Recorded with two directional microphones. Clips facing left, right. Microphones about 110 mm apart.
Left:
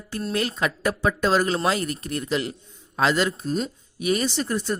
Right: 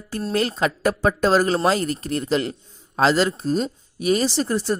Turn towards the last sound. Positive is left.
turn(degrees=-30)  # may be behind; listen again after turning